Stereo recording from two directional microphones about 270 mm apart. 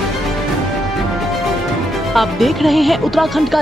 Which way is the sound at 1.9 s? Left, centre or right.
Centre.